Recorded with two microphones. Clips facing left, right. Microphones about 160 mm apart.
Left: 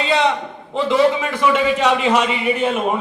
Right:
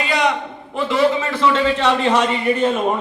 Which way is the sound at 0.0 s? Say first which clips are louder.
Left 2 dB; 25° left (ahead or behind).